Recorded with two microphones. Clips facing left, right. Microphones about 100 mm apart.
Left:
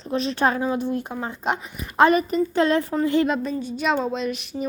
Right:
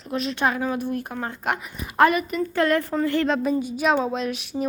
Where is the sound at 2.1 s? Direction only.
35° left (ahead or behind).